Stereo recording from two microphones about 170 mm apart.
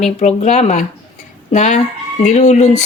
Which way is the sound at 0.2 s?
45° left (ahead or behind).